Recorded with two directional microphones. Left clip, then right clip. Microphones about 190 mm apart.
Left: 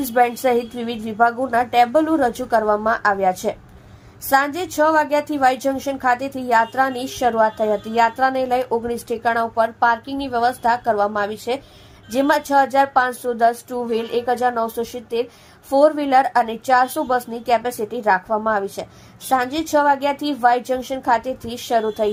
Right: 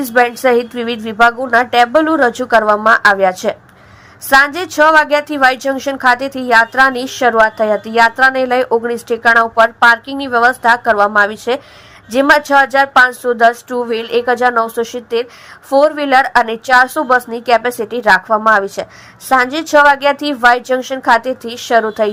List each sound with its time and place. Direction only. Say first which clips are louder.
0.0 s a woman's voice: right 5 dB; 15° right (ahead or behind)